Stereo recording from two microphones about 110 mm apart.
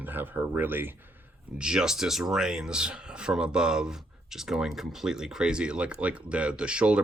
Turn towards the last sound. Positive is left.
turn(degrees=-10)  # may be behind; listen again after turning